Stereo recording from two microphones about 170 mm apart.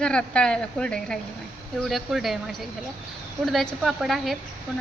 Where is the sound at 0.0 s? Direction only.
5° left (ahead or behind).